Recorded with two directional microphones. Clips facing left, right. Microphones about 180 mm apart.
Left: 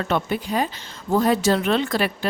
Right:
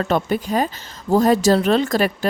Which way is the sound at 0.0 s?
40° right (ahead or behind).